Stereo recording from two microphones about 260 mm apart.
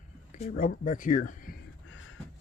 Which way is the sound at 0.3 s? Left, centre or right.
Left.